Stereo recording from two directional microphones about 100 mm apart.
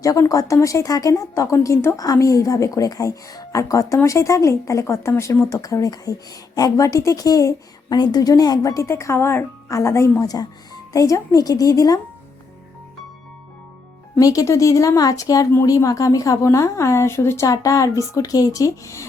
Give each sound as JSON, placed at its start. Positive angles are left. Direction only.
{"t": 0.0, "sound": "speech", "side_deg": 35}
{"t": 14.2, "sound": "speech", "side_deg": 35}